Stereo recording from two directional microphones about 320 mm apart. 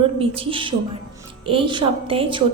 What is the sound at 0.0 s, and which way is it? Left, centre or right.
A woman's voice, centre.